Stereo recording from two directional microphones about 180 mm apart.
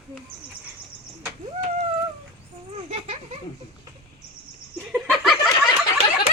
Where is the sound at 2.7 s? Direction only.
35° right (ahead or behind).